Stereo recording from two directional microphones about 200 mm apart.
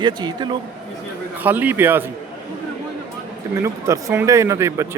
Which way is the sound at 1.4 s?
10° right (ahead or behind).